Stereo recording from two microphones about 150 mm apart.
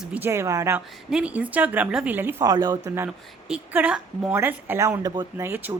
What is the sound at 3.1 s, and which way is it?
Speech, 5° right (ahead or behind).